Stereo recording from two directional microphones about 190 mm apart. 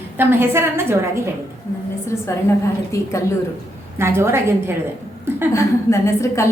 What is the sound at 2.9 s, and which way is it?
Speech, 15° left (ahead or behind).